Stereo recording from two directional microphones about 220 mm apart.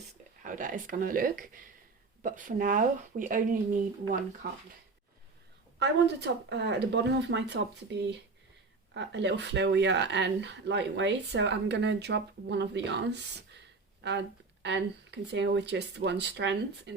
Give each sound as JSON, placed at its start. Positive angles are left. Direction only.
{"t": 0.4, "sound": "speech", "side_deg": -35}
{"t": 5.8, "sound": "speech", "side_deg": -50}